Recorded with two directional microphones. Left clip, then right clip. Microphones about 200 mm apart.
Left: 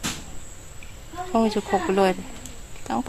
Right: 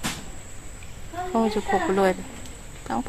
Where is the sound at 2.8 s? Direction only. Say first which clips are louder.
Left 1 dB; 30° left (ahead or behind).